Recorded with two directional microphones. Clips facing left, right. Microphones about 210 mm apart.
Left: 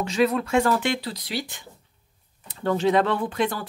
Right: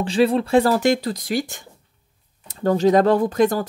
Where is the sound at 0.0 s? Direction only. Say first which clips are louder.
Right 4 dB; 30° right (ahead or behind).